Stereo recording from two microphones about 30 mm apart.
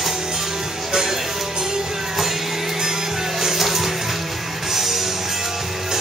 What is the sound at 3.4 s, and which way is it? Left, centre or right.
Music, centre.